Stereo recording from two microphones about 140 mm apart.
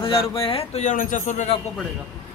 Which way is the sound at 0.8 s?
65° left (ahead or behind).